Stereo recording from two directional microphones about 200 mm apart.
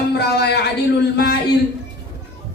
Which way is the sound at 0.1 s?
55° left (ahead or behind).